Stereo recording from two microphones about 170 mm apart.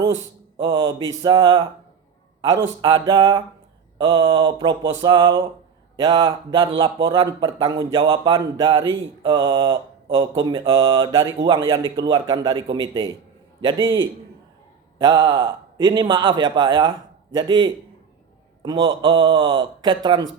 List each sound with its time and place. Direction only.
0.5 s speech: 25° right (ahead or behind)